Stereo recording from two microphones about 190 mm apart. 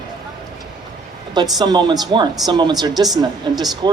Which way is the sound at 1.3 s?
20° right (ahead or behind).